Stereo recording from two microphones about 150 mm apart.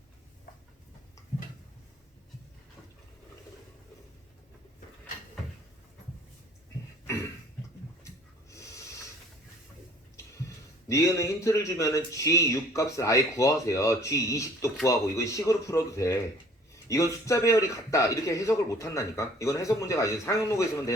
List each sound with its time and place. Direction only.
10.8 s a man's voice: 20° left (ahead or behind)